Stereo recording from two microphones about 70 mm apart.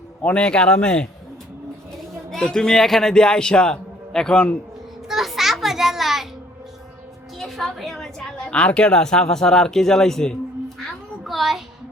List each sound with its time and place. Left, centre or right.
0.2 s a man's voice: centre
2.3 s a man's voice: centre
5.0 s children playing: centre
7.3 s a woman's voice: centre
11.3 s a sound: centre